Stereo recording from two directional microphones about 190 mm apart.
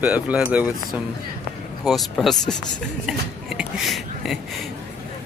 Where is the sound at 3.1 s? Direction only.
5° right (ahead or behind).